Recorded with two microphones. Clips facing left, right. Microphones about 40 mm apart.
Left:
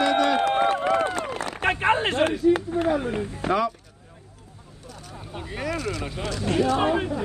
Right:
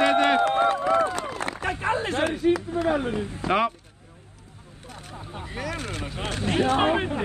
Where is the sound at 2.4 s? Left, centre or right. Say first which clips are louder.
Left 2 dB; right.